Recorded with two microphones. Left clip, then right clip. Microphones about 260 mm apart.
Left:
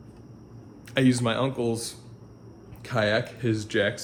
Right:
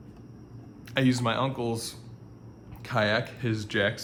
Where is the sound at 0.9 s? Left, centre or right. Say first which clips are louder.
Left 2 dB; right.